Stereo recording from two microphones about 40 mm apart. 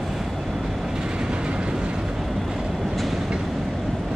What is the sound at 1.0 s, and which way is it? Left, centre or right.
Train, right.